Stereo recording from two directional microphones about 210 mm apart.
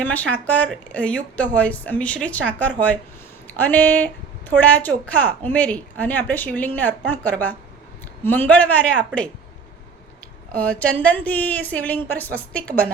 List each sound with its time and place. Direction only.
0.0 s a woman's voice: 5° left (ahead or behind)
10.5 s a woman's voice: 5° left (ahead or behind)